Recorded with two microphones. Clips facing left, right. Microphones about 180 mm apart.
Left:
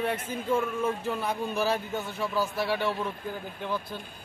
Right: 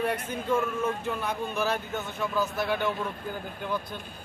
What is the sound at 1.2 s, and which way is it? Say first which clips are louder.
Speech: left 1 dB; 35° left (ahead or behind).